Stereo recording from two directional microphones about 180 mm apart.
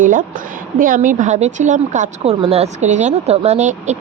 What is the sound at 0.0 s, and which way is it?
A woman's voice, 50° right (ahead or behind).